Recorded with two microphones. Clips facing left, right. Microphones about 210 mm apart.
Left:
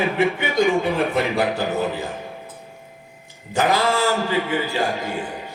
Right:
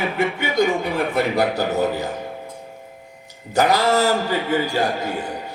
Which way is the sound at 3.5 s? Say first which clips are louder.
Right 2 dB; 40° right (ahead or behind).